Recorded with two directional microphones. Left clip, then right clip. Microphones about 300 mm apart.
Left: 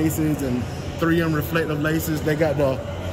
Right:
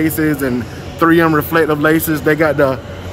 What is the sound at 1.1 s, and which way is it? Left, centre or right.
Speech, right.